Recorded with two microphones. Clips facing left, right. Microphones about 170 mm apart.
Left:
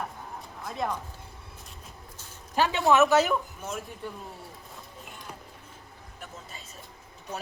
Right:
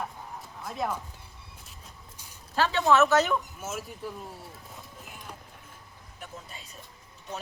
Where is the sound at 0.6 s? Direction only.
5° right (ahead or behind).